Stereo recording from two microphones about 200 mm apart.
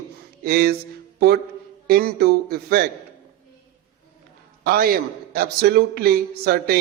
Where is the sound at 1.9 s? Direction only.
50° right (ahead or behind).